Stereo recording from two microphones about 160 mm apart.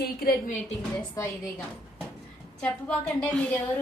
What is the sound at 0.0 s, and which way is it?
Speech, 65° left (ahead or behind).